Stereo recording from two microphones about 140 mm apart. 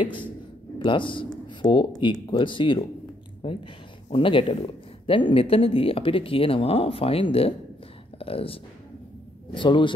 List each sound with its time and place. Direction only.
0.7 s speech: 35° left (ahead or behind)